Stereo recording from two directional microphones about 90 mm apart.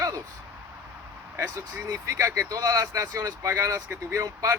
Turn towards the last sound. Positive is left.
turn(degrees=-35)  # may be behind; listen again after turning